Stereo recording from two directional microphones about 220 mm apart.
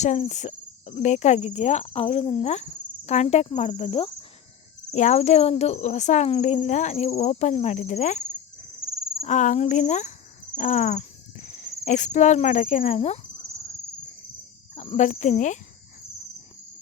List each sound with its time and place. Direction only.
0.0 s speech: 30° left (ahead or behind)
11.4 s cricket: 35° left (ahead or behind)
14.8 s speech: 30° left (ahead or behind)